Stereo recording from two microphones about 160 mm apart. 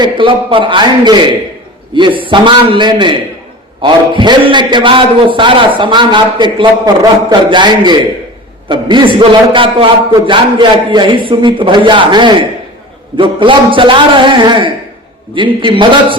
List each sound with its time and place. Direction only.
0.0 s a man's voice: 30° right (ahead or behind)